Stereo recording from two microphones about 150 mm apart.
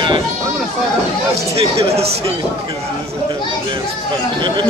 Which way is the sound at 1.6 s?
40° right (ahead or behind).